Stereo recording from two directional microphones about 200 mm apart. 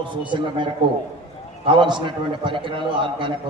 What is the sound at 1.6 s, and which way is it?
A man's voice, 25° right (ahead or behind).